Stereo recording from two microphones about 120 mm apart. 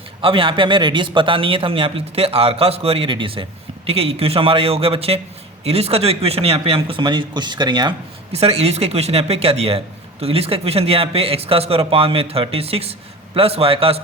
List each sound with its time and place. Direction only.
0.2 s a man's voice: 45° right (ahead or behind)
8.3 s a man's voice: 60° right (ahead or behind)